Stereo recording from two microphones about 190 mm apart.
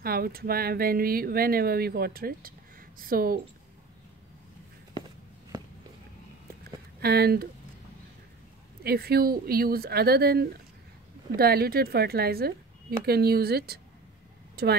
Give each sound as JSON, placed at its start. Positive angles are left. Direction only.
{"t": 0.0, "sound": "speech", "side_deg": -50}
{"t": 6.6, "sound": "a sound", "side_deg": -55}
{"t": 8.8, "sound": "speech", "side_deg": -55}
{"t": 14.5, "sound": "vehicle", "side_deg": -55}